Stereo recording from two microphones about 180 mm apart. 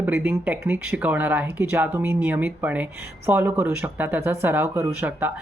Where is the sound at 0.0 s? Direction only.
10° right (ahead or behind).